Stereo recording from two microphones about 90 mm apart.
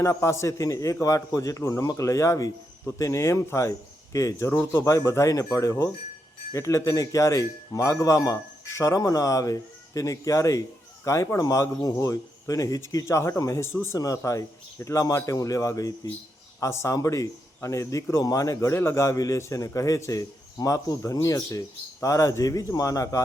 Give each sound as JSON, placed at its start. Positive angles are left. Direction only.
{"t": 0.0, "sound": "a man's voice", "side_deg": 35}